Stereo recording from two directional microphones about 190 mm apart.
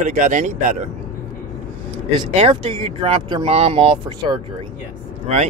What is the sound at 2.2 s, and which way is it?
Speech, 30° right (ahead or behind).